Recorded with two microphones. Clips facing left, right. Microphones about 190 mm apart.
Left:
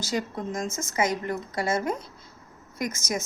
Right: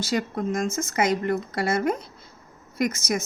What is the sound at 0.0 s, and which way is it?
A woman's voice, 65° right (ahead or behind).